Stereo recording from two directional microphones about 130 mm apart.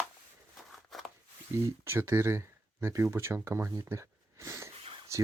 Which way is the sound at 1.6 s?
20° right (ahead or behind).